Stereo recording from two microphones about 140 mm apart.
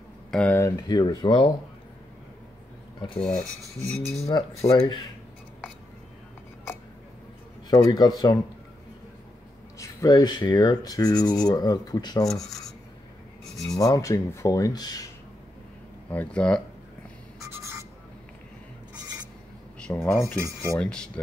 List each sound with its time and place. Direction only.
0.3 s speech: 10° left (ahead or behind)
0.7 s speech: 30° left (ahead or behind)
3.2 s speech: 5° left (ahead or behind)
4.3 s speech: 35° left (ahead or behind)
7.7 s speech: 30° left (ahead or behind)
9.8 s speech: 25° left (ahead or behind)
13.7 s speech: 25° left (ahead or behind)
16.1 s speech: 10° left (ahead or behind)
19.8 s speech: 15° left (ahead or behind)
20.3 s cutlery: 20° right (ahead or behind)
20.7 s speech: 5° left (ahead or behind)